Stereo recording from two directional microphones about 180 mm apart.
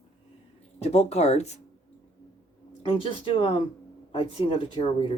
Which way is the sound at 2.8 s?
30° left (ahead or behind).